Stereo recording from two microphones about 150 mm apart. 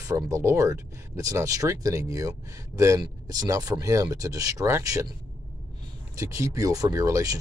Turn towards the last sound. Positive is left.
turn(degrees=-25)  # may be behind; listen again after turning